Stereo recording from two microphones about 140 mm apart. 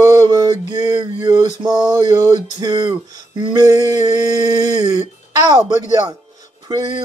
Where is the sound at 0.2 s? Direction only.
25° right (ahead or behind).